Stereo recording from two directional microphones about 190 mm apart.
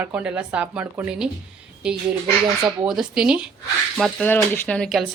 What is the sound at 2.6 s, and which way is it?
Speech, 5° right (ahead or behind).